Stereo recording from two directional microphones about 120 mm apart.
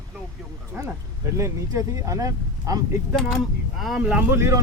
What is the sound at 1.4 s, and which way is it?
Speech, 25° right (ahead or behind).